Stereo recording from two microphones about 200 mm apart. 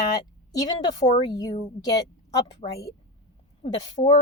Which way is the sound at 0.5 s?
20° left (ahead or behind).